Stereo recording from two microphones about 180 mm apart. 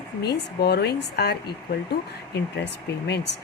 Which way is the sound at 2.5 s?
70° left (ahead or behind).